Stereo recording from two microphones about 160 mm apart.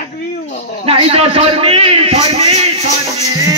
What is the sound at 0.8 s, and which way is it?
A man's voice, 35° right (ahead or behind).